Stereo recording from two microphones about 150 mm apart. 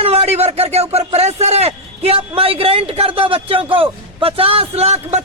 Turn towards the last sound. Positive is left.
turn(degrees=-45)  # may be behind; listen again after turning